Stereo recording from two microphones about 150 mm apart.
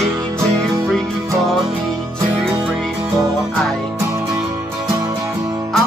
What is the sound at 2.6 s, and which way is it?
Music, centre (ahead or behind).